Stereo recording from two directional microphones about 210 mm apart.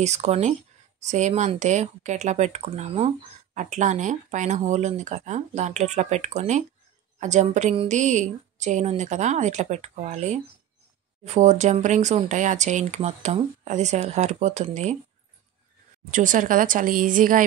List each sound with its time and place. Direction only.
0.0 s speech: 30° right (ahead or behind)
16.1 s speech: 40° right (ahead or behind)